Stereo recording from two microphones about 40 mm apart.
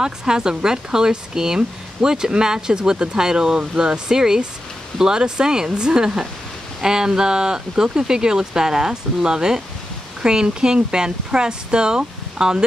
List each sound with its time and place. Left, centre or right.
0.0 s speech: centre